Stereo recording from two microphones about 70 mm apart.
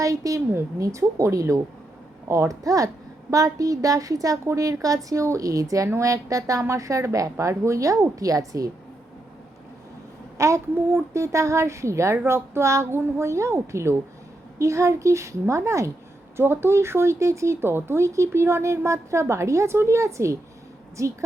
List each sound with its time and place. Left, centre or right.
0.0 s a woman's voice: right
10.3 s speech: right
16.4 s speech: right